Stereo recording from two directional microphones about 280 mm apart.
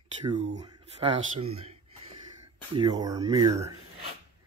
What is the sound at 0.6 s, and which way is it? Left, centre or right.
Speech, centre.